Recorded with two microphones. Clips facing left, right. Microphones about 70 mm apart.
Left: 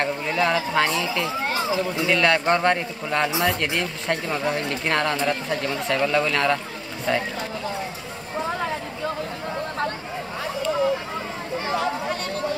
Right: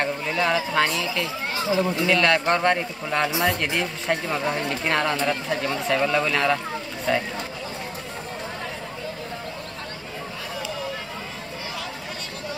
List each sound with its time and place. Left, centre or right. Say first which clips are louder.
0.0 s a man's voice: left 1 dB; centre